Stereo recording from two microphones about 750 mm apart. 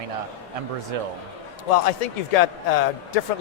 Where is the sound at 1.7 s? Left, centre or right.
Left.